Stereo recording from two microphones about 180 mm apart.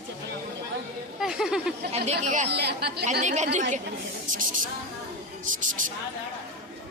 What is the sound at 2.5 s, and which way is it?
Speech, 70° right (ahead or behind).